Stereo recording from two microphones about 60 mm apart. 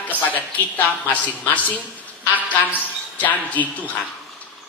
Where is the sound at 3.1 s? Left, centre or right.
Left.